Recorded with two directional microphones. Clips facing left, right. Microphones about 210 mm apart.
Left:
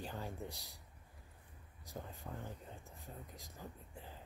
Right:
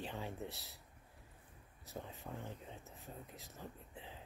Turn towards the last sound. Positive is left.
turn(degrees=0)  # may be behind; listen again after turning